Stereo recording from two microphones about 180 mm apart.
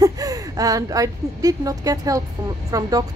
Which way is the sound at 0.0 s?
20° right (ahead or behind).